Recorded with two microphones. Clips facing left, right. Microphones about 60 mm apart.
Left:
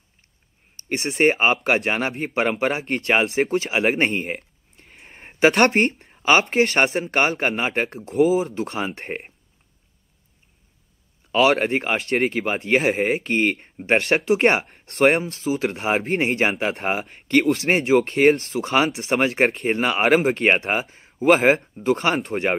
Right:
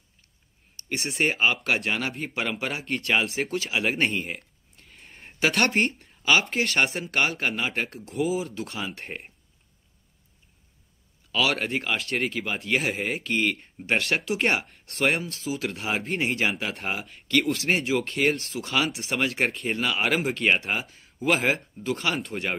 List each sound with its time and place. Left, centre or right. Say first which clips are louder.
0.7 s speech: left 6 dB; left
4.7 s a sound: left 4 dB; left
5.6 s speech: left 6 dB; left
5.9 s speech: left 5 dB; left
9.0 s speech: left 6 dB; left
11.3 s speech: left 8 dB; left
12.9 s a man's voice: left 6 dB; left